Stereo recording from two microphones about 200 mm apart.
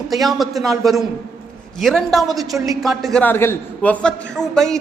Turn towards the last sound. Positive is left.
turn(degrees=5)  # may be behind; listen again after turning